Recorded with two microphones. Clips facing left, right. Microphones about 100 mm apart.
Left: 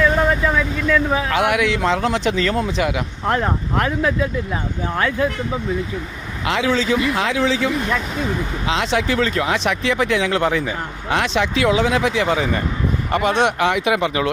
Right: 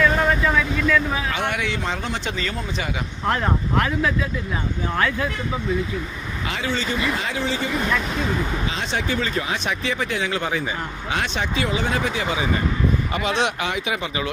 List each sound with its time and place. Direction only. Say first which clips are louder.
0.4 s vehicle: left 1 dB; 25° left (ahead or behind)
1.3 s speech: left 7 dB; 90° left; by 2.9 s 70° left (ahead or behind)
3.3 s speech: left 2 dB; 30° left (ahead or behind)
6.4 s speech: left 7 dB; 85° left
13.1 s speech: left 10 dB; 50° left (ahead or behind)
13.6 s speech: left 8 dB; 70° left (ahead or behind)